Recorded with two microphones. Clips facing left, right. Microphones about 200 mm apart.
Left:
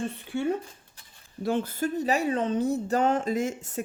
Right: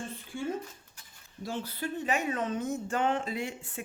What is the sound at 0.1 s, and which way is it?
Speech, 65° left (ahead or behind).